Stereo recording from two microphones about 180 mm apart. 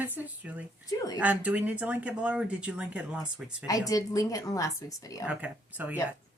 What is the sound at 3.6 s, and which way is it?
Speech, 20° left (ahead or behind).